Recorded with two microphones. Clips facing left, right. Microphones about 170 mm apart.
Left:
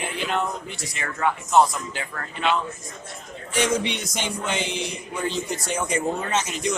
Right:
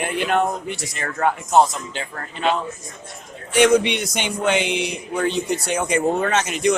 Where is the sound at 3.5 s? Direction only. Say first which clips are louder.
Right 8 dB; 65° right (ahead or behind).